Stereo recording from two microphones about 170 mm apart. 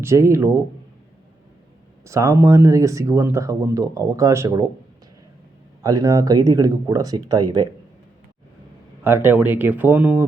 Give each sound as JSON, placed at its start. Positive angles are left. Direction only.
{"t": 0.0, "sound": "speech", "side_deg": -15}
{"t": 2.0, "sound": "speech", "side_deg": -15}
{"t": 5.8, "sound": "speech", "side_deg": -20}
{"t": 9.0, "sound": "speech", "side_deg": -15}